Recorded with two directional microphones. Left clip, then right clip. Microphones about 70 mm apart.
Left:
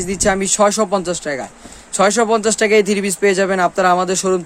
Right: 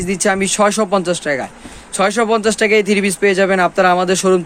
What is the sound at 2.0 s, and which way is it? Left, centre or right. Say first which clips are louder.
Speech: even; left.